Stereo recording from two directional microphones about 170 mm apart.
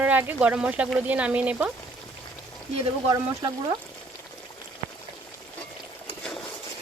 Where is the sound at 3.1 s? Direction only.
25° right (ahead or behind).